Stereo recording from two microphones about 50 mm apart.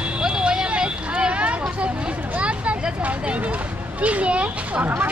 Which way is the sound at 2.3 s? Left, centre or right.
Right.